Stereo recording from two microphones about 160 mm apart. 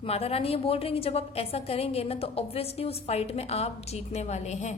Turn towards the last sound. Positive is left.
turn(degrees=45)  # may be behind; listen again after turning